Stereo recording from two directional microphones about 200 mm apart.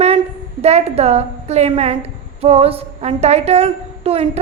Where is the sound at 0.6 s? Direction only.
30° right (ahead or behind).